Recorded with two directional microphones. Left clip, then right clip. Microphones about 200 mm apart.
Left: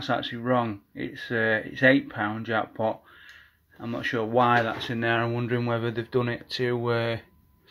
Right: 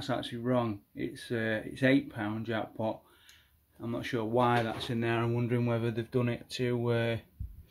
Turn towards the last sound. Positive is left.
turn(degrees=-10)  # may be behind; listen again after turning